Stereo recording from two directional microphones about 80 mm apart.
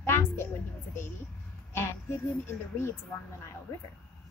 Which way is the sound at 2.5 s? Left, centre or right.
Left.